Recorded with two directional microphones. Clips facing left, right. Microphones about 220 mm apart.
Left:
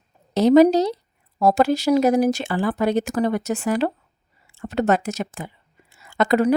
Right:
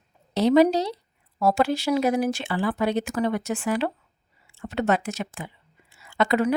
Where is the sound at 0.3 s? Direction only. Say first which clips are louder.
Left 5 dB; 45° left (ahead or behind).